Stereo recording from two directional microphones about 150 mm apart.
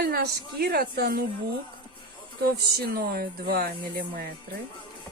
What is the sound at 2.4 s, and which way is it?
Speech, 85° right.